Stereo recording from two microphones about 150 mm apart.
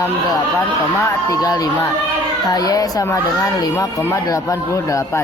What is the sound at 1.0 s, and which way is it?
Speech, 25° left (ahead or behind).